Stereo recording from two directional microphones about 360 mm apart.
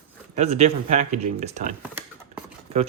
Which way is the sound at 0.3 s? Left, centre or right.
Centre.